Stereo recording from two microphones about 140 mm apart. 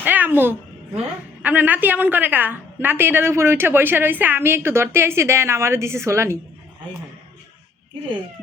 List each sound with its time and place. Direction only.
0.0 s a woman's voice: 15° right (ahead or behind)